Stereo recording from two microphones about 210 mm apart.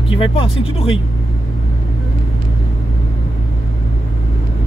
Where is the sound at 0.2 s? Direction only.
25° left (ahead or behind).